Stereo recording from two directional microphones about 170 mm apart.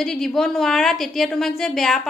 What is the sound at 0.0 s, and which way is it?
A woman's voice, centre (ahead or behind).